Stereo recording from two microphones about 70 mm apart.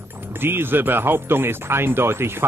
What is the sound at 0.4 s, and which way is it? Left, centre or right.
Speech, right.